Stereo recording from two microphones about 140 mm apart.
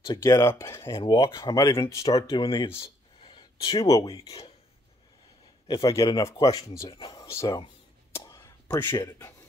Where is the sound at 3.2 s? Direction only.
40° left (ahead or behind).